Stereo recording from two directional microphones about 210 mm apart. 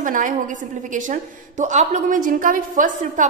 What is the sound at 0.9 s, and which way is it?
A woman's voice, 35° right (ahead or behind).